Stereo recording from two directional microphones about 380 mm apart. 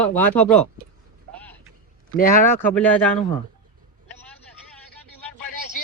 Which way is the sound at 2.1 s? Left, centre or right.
Left.